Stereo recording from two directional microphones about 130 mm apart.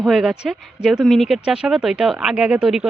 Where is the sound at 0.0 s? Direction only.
Centre (ahead or behind).